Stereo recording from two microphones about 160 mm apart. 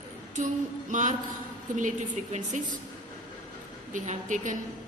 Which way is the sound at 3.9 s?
50° right (ahead or behind).